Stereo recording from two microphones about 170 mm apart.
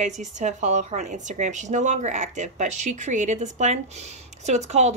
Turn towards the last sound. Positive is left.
turn(degrees=-40)  # may be behind; listen again after turning